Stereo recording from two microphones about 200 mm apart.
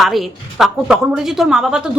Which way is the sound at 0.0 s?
Centre (ahead or behind).